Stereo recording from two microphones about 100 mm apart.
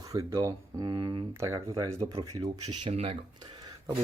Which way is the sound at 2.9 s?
80° right.